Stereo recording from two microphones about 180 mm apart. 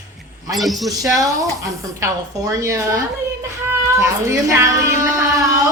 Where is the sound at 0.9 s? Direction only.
20° right (ahead or behind).